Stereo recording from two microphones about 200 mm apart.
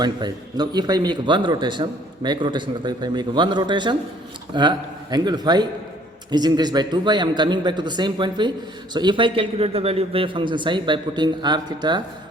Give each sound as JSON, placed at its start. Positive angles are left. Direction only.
{"t": 0.0, "sound": "speech", "side_deg": -20}